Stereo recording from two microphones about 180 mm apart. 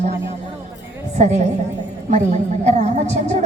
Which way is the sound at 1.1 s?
40° right (ahead or behind).